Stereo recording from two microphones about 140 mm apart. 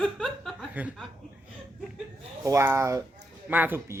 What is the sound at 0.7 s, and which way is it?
Speech, 10° right (ahead or behind).